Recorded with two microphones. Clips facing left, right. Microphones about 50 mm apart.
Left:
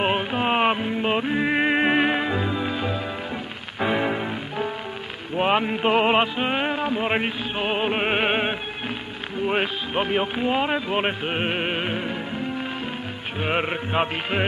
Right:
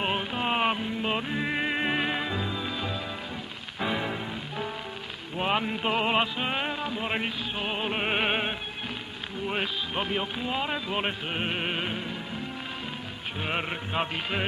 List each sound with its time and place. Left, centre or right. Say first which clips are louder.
0.0 s music: left 6 dB; left
13.4 s music: left 7 dB; left